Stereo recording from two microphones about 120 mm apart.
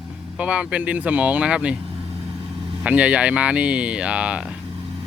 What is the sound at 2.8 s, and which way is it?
Speech, 10° right (ahead or behind).